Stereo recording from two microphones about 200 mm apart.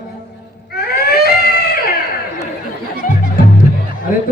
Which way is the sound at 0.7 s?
50° left (ahead or behind).